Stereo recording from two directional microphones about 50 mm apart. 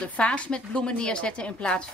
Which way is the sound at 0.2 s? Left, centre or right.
Left.